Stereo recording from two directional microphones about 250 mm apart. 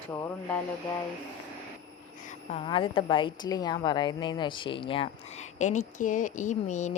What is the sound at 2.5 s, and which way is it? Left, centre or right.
Speech, centre.